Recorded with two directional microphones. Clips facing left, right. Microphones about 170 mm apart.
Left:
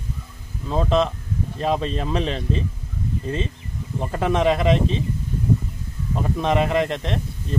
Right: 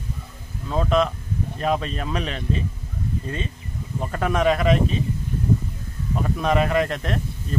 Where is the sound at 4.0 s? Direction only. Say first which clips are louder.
Left 2 dB; 20° left (ahead or behind).